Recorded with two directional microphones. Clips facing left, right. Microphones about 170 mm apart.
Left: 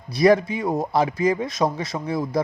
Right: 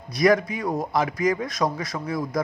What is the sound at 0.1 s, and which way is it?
Speech, 30° left (ahead or behind).